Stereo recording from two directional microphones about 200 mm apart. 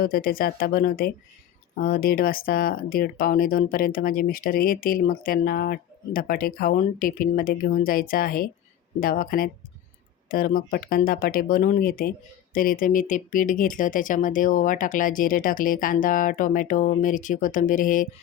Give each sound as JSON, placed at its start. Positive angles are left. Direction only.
{"t": 0.0, "sound": "speech", "side_deg": 45}